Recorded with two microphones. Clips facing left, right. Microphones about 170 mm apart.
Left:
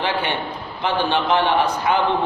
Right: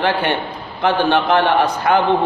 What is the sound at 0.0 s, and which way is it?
A man's voice, 55° right (ahead or behind).